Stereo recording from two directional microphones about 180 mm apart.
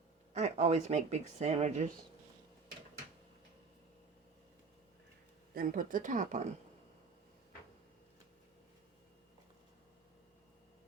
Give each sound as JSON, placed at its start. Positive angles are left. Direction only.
{"t": 0.3, "sound": "speech", "side_deg": -35}
{"t": 5.5, "sound": "speech", "side_deg": -50}